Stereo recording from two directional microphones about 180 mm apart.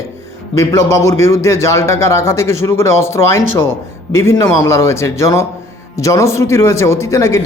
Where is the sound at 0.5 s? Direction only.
15° left (ahead or behind).